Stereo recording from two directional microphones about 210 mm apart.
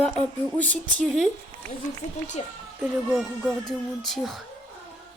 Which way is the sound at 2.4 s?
30° left (ahead or behind).